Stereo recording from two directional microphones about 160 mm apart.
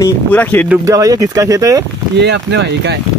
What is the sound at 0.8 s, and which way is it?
Speech, 20° right (ahead or behind).